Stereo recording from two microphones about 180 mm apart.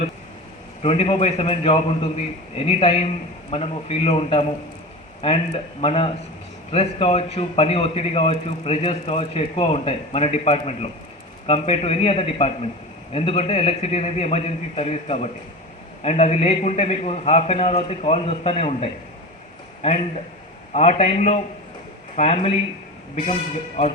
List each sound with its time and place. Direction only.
0.8 s a man's voice: 35° left (ahead or behind)
20.7 s a man's voice: 35° left (ahead or behind)